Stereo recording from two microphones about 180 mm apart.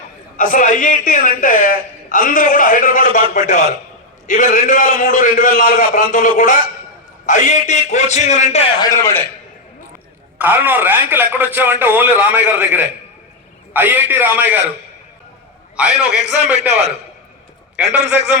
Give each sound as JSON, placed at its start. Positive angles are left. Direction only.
{"t": 0.3, "sound": "a man's voice", "side_deg": 45}
{"t": 8.8, "sound": "a man's voice", "side_deg": 15}
{"t": 10.3, "sound": "speech", "side_deg": -10}
{"t": 15.7, "sound": "a man's voice", "side_deg": -5}
{"t": 17.8, "sound": "a man's voice", "side_deg": -75}